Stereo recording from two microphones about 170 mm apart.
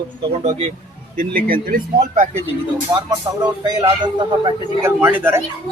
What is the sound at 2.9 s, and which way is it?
A man's voice, 20° right (ahead or behind).